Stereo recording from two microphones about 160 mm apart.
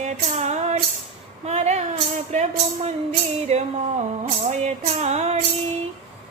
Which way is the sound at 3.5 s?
45° right (ahead or behind).